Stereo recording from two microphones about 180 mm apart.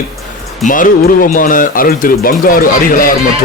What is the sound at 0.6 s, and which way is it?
Speech, 50° left (ahead or behind).